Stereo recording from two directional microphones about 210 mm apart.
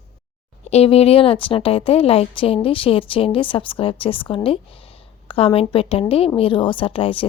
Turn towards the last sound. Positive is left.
turn(degrees=25)  # may be behind; listen again after turning